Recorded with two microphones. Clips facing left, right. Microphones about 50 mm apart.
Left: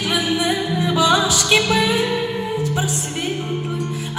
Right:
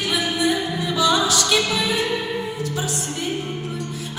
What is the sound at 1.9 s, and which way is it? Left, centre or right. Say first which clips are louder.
Music: left 3 dB; left.